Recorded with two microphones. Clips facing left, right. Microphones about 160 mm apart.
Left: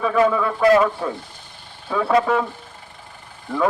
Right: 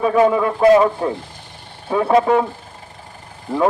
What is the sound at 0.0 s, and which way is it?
A man's voice, 25° right (ahead or behind).